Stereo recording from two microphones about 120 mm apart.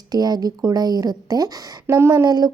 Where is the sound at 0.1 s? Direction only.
35° right (ahead or behind).